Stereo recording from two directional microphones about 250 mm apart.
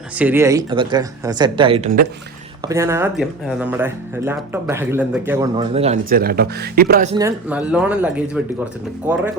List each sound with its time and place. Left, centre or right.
0.2 s speech: centre
5.7 s speech: right
7.2 s speech: centre